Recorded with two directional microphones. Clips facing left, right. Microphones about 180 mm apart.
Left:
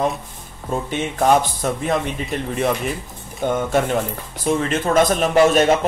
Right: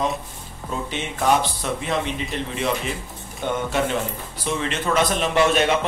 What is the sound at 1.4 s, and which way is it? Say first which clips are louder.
A man's voice: left 3 dB; 45° left (ahead or behind).